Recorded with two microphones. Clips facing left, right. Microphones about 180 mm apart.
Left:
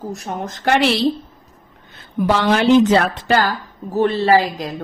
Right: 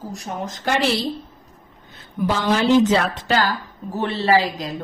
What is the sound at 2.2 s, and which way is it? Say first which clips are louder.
A woman's voice: left 3 dB; 70° left (ahead or behind).